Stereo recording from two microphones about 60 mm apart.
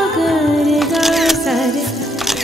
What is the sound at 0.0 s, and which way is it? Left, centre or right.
Music, centre.